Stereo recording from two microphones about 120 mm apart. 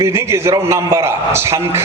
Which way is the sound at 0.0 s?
20° right (ahead or behind).